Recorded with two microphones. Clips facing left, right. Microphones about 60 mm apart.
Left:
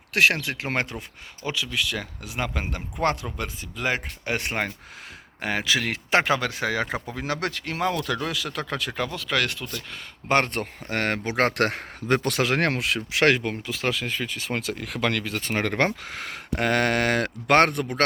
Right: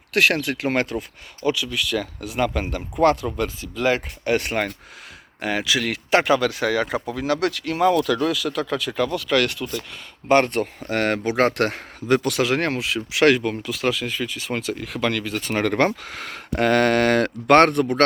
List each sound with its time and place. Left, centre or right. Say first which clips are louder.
0.1 s speech: right 2 dB; centre; by 7.7 s left
7.7 s speech: right 8 dB; centre
10.3 s speech: right 5 dB; left
12.0 s speech: right 3 dB; left
12.5 s speech: right 1 dB; left
15.5 s speech: right 4 dB; left; by 18.0 s centre